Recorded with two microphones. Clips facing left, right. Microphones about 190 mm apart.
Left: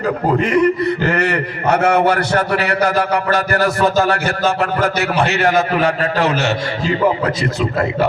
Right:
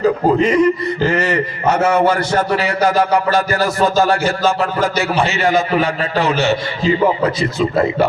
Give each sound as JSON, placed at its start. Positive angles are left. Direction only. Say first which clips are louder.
{"t": 0.0, "sound": "a man's voice", "louder": "right 3 dB", "side_deg": 60}